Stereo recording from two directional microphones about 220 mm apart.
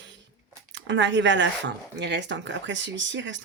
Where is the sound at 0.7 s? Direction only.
55° right (ahead or behind).